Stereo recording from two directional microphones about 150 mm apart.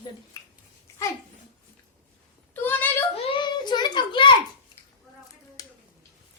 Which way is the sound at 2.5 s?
10° left (ahead or behind).